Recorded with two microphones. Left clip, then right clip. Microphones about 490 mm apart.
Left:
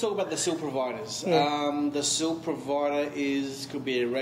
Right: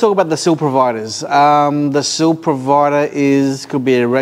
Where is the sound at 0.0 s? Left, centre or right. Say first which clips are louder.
Right 15 dB; right.